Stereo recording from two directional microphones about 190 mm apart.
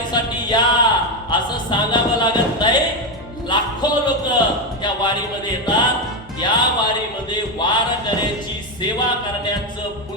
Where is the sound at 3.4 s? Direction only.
25° left (ahead or behind).